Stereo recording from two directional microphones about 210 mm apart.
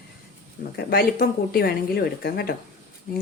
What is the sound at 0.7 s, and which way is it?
Speech, 45° left (ahead or behind).